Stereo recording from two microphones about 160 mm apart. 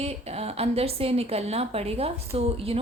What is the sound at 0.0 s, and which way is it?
A woman's voice, 40° right (ahead or behind).